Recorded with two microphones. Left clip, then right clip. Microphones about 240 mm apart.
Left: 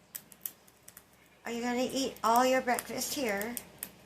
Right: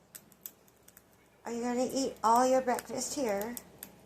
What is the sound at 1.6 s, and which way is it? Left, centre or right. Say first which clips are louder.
Speech: even; left.